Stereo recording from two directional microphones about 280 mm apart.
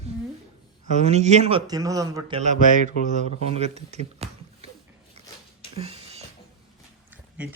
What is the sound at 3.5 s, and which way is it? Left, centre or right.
Speech, right.